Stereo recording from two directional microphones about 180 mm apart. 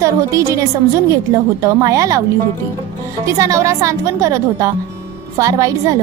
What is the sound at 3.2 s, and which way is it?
A woman's voice, 15° right (ahead or behind).